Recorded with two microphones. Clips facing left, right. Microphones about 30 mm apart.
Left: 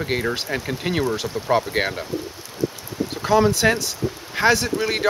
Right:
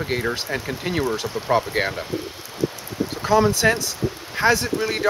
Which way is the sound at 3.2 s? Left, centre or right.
Centre.